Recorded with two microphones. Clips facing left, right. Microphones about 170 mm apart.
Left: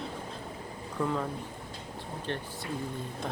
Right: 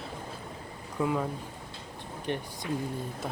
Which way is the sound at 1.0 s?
10° right (ahead or behind).